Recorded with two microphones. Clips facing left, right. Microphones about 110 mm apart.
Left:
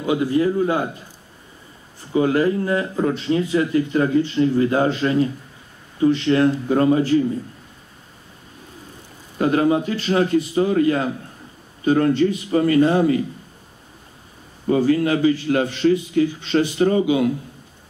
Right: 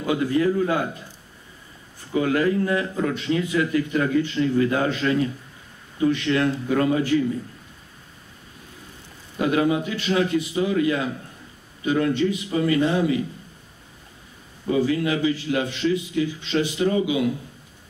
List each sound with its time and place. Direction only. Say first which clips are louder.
0.0 s a man's voice: left 2 dB; 25° left (ahead or behind)
2.1 s speech: left 3 dB; 30° left (ahead or behind)
9.4 s a man's voice: left 3 dB; 40° left (ahead or behind)
14.7 s a man's voice: left 4 dB; 45° left (ahead or behind)